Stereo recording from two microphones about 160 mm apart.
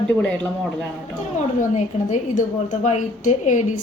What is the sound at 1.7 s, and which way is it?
A woman's voice, 50° left (ahead or behind).